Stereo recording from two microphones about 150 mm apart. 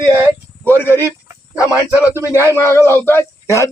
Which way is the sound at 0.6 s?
15° left (ahead or behind).